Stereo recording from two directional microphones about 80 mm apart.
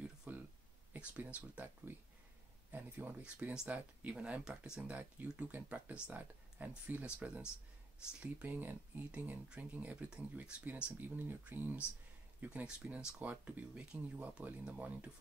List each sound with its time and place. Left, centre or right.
0.3 s a sound: centre
0.9 s speech: centre
3.2 s speech: centre
12.6 s speech: centre